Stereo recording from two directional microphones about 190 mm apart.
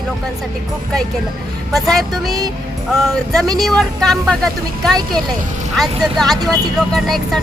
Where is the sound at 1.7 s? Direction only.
Centre (ahead or behind).